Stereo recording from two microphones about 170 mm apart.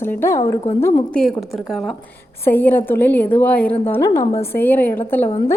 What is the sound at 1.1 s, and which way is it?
A woman's voice, centre (ahead or behind).